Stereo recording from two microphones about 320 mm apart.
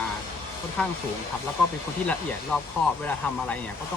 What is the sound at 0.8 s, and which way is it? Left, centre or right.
Speech, centre.